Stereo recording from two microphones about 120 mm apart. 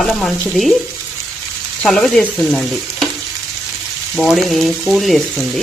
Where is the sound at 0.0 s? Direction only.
Centre (ahead or behind).